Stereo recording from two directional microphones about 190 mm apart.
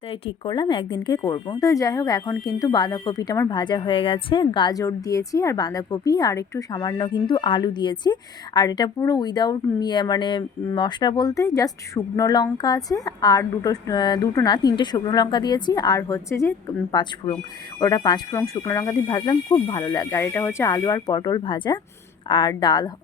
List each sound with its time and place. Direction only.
0.1 s a woman's voice: 25° left (ahead or behind)